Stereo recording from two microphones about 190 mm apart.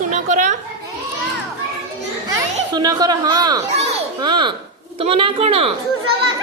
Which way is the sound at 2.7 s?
20° right (ahead or behind).